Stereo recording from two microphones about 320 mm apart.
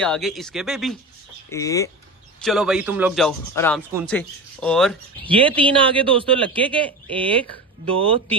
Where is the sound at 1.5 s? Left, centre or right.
Centre.